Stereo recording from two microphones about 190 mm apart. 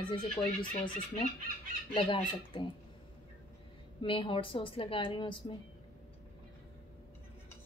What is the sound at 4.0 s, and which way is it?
A woman's voice, 25° left (ahead or behind).